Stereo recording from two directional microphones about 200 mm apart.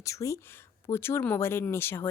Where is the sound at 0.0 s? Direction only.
15° left (ahead or behind).